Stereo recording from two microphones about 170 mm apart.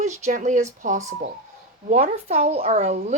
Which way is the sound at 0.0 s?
45° right (ahead or behind).